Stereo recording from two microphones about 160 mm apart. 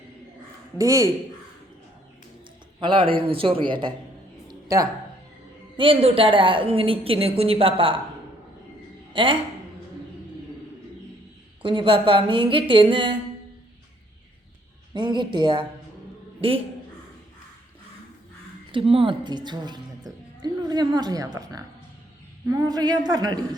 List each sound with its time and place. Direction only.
0.8 s a woman's voice: 20° right (ahead or behind)
2.8 s a woman's voice: 35° right (ahead or behind)
4.4 s a sound: 20° right (ahead or behind)
5.7 s a woman's voice: 35° right (ahead or behind)
9.1 s a woman's voice: 35° right (ahead or behind)
11.6 s a woman's voice: 30° right (ahead or behind)
14.9 s a woman's voice: 30° right (ahead or behind)
18.7 s a woman's voice: 35° right (ahead or behind)